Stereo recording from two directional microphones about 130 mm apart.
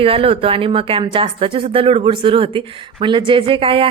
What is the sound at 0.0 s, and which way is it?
A woman's voice, 45° right (ahead or behind).